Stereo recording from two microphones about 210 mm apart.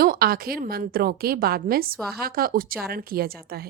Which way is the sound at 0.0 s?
45° right (ahead or behind).